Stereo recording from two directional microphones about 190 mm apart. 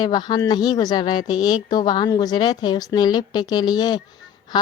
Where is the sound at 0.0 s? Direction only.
20° left (ahead or behind).